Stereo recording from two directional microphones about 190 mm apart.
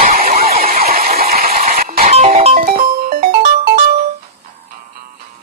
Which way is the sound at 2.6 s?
50° right (ahead or behind).